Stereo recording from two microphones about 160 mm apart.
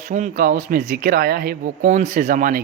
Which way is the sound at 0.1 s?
55° right (ahead or behind).